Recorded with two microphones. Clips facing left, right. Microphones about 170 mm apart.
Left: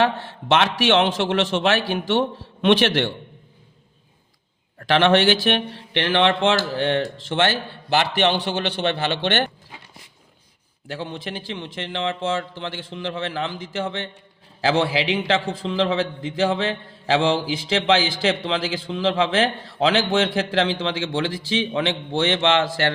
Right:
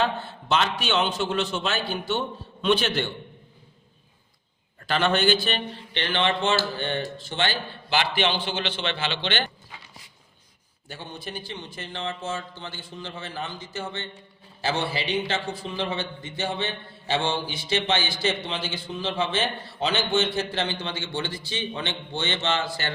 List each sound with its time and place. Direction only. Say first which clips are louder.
0.0 s a man's voice: left 5 dB; 90° left
4.8 s a man's voice: left 6 dB; 90° left; by 9.5 s 60° left (ahead or behind)
10.8 s a man's voice: left 7 dB; 90° left